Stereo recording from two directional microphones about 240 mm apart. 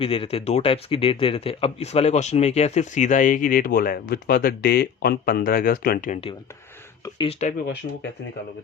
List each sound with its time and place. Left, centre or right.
0.0 s speech: left